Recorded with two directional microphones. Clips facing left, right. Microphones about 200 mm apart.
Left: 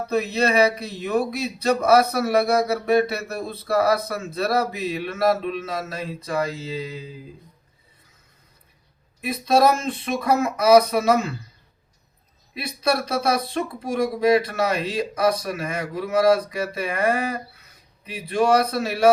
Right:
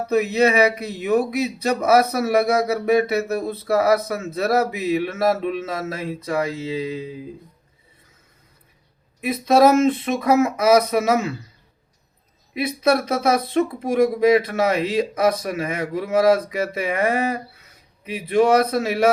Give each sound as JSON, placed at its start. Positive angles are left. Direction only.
{"t": 0.1, "sound": "speech", "side_deg": -20}
{"t": 9.2, "sound": "speech", "side_deg": -20}
{"t": 12.5, "sound": "speech", "side_deg": -20}